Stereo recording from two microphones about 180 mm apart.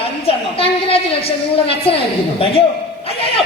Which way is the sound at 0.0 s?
30° left (ahead or behind).